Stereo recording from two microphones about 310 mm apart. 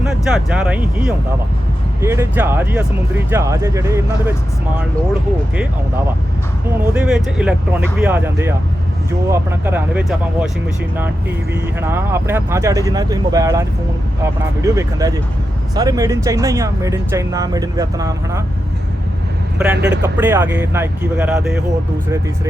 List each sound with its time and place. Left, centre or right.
0.3 s speech: centre
6.9 s speech: centre
11.8 s speech: centre
19.7 s speech: right
20.1 s speech: centre